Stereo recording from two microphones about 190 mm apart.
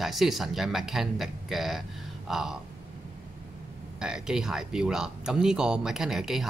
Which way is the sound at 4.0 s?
5° right (ahead or behind).